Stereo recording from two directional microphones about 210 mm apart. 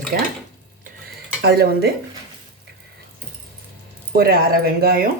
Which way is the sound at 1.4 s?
50° right (ahead or behind).